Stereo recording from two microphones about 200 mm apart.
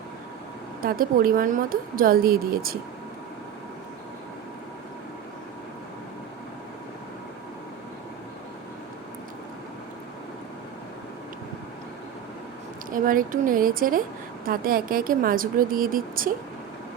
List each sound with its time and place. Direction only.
0.8 s a woman's voice: 45° right (ahead or behind)
12.9 s a woman's voice: 45° right (ahead or behind)